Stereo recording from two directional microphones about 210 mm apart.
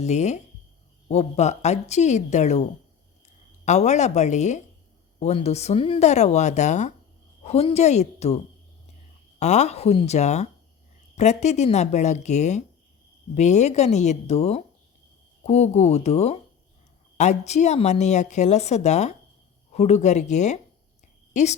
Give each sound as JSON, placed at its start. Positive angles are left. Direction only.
{"t": 0.0, "sound": "speech", "side_deg": 35}
{"t": 9.4, "sound": "speech", "side_deg": 30}